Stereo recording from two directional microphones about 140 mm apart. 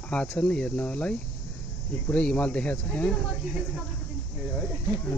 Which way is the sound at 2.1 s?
10° left (ahead or behind).